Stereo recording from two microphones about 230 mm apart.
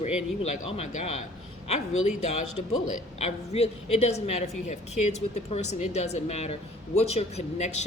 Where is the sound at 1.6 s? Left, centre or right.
Left.